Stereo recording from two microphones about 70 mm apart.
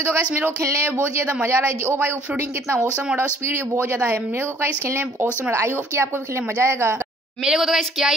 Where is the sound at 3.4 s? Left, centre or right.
Right.